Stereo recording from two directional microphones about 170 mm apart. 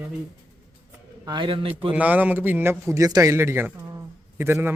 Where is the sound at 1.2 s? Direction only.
25° right (ahead or behind).